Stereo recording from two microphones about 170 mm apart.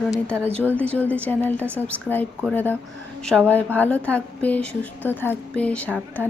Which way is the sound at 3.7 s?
10° left (ahead or behind).